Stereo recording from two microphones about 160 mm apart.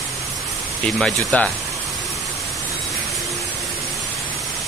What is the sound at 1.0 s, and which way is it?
Speech, 5° left (ahead or behind).